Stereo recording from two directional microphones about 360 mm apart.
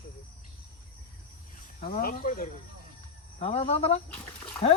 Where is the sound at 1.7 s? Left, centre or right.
Left.